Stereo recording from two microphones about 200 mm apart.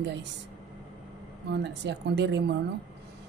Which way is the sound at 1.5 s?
60° right (ahead or behind).